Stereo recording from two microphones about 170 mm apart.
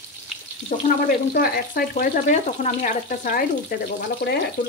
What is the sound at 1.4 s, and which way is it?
Speech, 65° left (ahead or behind).